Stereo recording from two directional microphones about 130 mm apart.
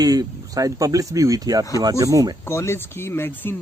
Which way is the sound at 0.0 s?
30° right (ahead or behind).